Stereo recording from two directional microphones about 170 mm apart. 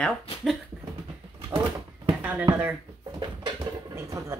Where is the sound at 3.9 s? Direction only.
15° right (ahead or behind).